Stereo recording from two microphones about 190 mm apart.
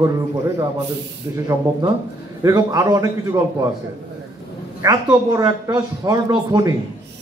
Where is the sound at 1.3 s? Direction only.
15° right (ahead or behind).